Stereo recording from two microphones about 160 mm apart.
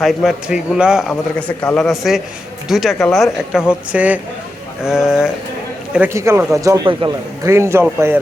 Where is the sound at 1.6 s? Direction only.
5° left (ahead or behind).